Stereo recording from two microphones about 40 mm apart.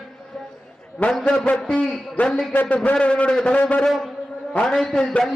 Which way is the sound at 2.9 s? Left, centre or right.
Left.